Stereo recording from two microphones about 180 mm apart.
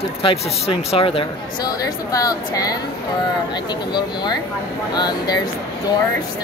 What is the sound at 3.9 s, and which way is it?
Speech, 25° left (ahead or behind).